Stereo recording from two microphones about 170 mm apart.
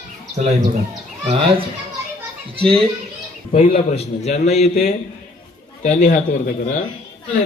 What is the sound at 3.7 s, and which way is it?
A man's voice, 45° left (ahead or behind).